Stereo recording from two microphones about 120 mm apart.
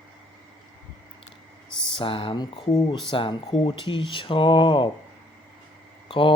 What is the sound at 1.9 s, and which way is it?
Speech, 45° left (ahead or behind).